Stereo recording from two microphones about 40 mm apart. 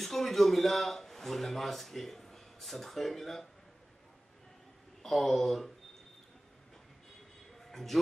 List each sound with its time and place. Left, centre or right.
0.0 s a man's voice: centre
5.0 s speech: centre
7.6 s a sound: centre